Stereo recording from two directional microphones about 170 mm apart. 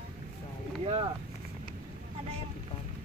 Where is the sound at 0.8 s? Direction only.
35° right (ahead or behind).